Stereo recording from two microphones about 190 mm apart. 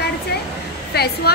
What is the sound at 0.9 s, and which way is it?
Speech, 55° left (ahead or behind).